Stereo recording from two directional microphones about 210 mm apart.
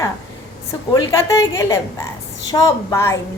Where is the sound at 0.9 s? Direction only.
15° left (ahead or behind).